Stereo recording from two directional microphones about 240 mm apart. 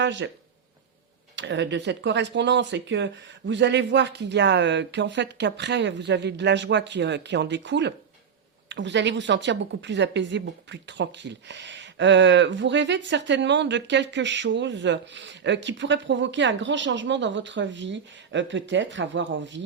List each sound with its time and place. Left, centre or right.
0.0 s speech: right
1.4 s a woman's voice: right